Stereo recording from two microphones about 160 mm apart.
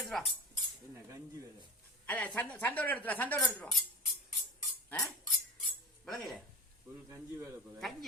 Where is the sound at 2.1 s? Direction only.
10° left (ahead or behind).